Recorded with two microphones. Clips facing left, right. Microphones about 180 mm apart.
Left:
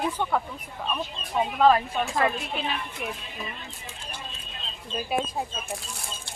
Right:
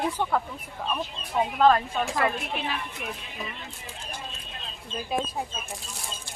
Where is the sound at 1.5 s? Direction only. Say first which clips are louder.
Left 1 dB; 5° left (ahead or behind).